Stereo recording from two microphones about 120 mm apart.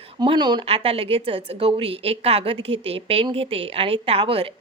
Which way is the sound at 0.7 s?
55° right (ahead or behind).